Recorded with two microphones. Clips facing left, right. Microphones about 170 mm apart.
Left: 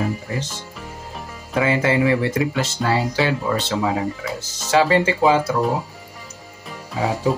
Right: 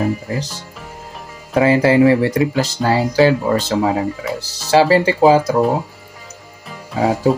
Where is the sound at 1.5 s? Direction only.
35° right (ahead or behind).